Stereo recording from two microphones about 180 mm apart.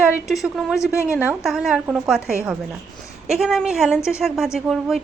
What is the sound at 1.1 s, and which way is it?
A woman's voice, 5° right (ahead or behind).